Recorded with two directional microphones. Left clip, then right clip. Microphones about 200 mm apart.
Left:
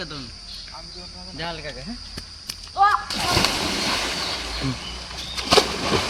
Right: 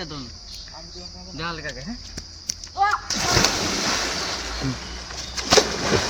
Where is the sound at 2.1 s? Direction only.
10° right (ahead or behind).